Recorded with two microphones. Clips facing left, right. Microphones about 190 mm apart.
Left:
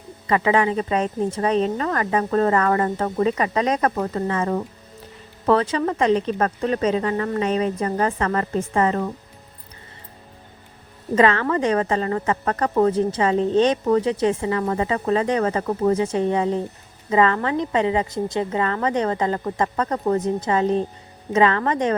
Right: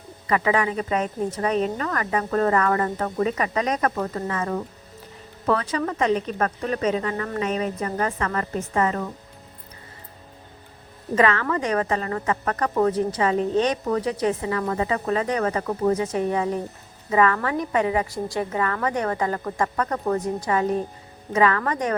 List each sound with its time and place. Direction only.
0.3 s speech: 30° left (ahead or behind)
11.1 s a woman's voice: 30° left (ahead or behind)